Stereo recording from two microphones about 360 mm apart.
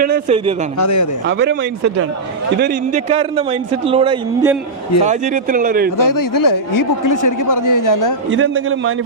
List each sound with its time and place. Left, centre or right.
0.0 s a man's voice: centre
0.8 s speech: left
1.3 s a man's voice: right
6.0 s a man's voice: left
8.3 s a man's voice: right